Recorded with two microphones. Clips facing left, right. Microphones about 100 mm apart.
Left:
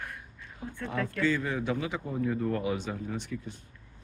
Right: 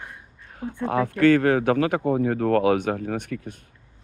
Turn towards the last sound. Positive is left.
turn(degrees=-60)  # may be behind; listen again after turning